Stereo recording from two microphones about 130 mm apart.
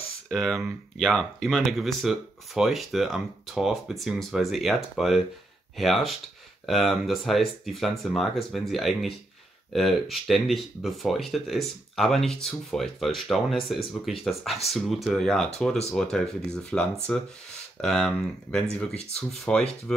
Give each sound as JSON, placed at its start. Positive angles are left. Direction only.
{"t": 0.3, "sound": "speech", "side_deg": 0}
{"t": 18.9, "sound": "speech", "side_deg": 55}
{"t": 19.3, "sound": "speech", "side_deg": 5}